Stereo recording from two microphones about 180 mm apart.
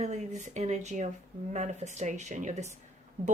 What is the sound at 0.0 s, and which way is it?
Speech, 40° right (ahead or behind).